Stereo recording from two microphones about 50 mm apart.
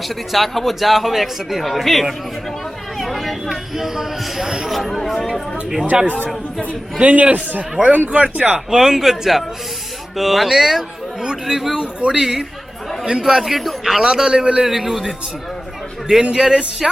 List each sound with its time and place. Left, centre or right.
0.1 s speech: centre
5.9 s a man's voice: centre
7.0 s a man's voice: right
8.5 s a man's voice: centre
12.2 s a man's voice: centre
14.6 s a man's voice: centre
16.3 s a man's voice: centre